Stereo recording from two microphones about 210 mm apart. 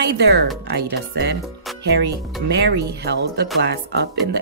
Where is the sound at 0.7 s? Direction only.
55° right (ahead or behind).